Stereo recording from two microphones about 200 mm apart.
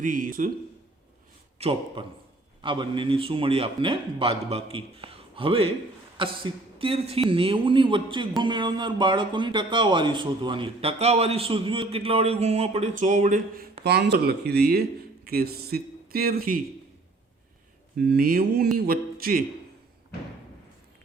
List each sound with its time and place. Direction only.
0.0 s speech: 45° right (ahead or behind)
1.5 s a man's voice: 30° right (ahead or behind); by 16.6 s 45° right (ahead or behind)
17.9 s speech: 55° right (ahead or behind)